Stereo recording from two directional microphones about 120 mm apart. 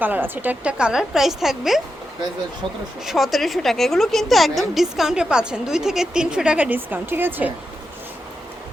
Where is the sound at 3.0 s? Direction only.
Centre (ahead or behind).